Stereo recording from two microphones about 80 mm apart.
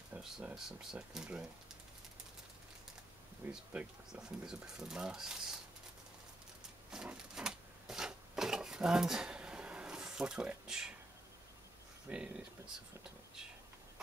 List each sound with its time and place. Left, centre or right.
0.1 s speech: centre
3.4 s speech: right
4.1 s speech: centre
6.9 s a sound: centre
12.1 s speech: centre